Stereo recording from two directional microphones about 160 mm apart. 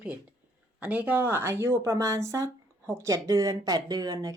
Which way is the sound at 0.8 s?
10° right (ahead or behind).